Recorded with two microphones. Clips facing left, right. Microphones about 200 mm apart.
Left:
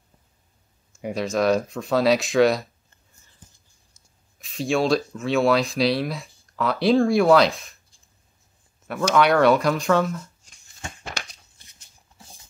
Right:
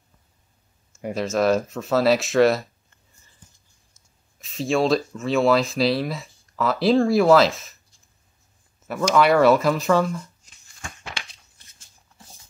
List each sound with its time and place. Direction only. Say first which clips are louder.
1.0 s speech: right 1 dB; centre (ahead or behind)
4.4 s speech: right 1 dB; centre (ahead or behind)
9.1 s speech: right 1 dB; centre (ahead or behind)
11.1 s a sound: left 2 dB; 40° left (ahead or behind)